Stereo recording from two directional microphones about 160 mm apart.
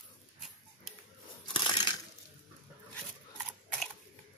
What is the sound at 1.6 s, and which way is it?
Crushing, 30° left (ahead or behind).